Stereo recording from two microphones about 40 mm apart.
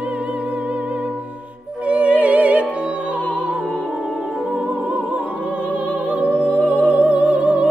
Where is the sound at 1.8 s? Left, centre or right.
Right.